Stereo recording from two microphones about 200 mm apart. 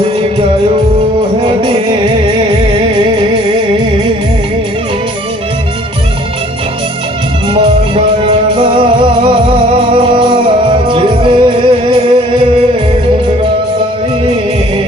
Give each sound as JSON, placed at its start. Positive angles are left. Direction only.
{"t": 1.5, "sound": "music", "side_deg": -25}
{"t": 7.5, "sound": "music", "side_deg": -30}